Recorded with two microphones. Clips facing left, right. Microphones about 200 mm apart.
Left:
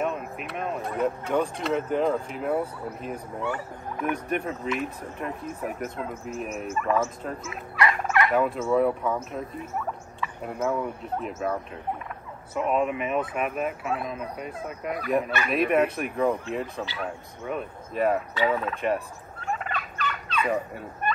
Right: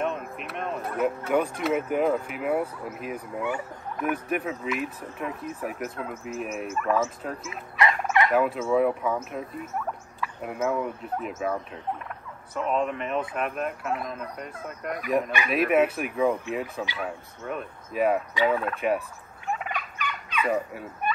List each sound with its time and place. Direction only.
0.0 s speech: centre (ahead or behind)
7.7 s turkey: 20° right (ahead or behind)
8.3 s speech: centre (ahead or behind)
12.5 s speech: 10° left (ahead or behind)
19.5 s fowl: 10° right (ahead or behind)